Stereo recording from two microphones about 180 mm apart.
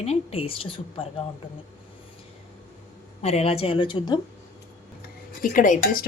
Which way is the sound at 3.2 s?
35° left (ahead or behind).